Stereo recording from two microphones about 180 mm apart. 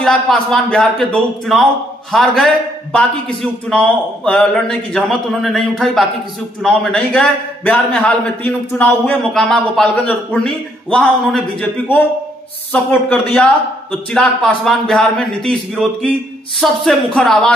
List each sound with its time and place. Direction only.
0.0 s a man's voice: 5° left (ahead or behind)
12.7 s a man's voice: 5° left (ahead or behind)